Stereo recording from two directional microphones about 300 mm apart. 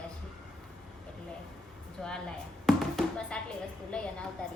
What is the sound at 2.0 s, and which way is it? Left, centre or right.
Speech, centre.